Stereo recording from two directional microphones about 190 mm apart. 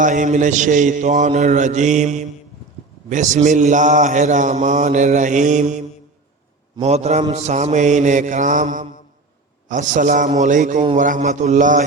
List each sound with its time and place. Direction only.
0.0 s mantra: 40° right (ahead or behind)